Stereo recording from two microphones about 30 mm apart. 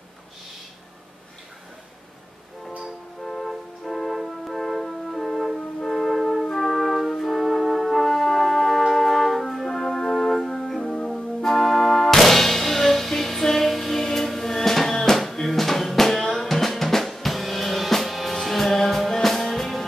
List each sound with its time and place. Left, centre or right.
3.3 s music: centre
7.1 s brass instrument: centre
8.9 s music: centre
9.7 s organ: centre
10.8 s music: left
11.4 s music: centre
15.4 s drum: centre
19.2 s music: centre